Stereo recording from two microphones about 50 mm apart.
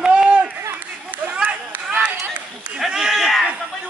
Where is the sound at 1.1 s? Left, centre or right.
Right.